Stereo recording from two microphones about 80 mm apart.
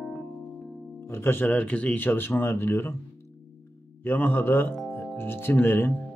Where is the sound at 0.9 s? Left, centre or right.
Left.